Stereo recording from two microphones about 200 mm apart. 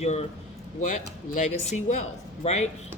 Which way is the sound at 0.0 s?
35° left (ahead or behind).